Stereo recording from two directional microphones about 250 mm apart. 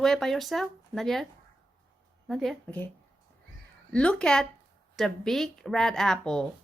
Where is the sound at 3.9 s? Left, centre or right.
Centre.